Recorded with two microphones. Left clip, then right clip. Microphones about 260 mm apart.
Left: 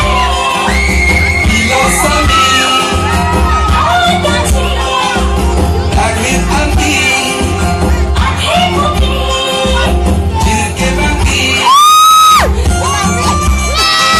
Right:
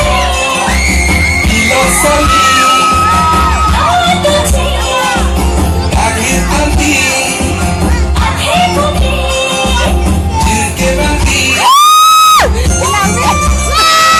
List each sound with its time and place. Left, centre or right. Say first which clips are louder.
11.7 s music: even; right
13.7 s music: right 3 dB; right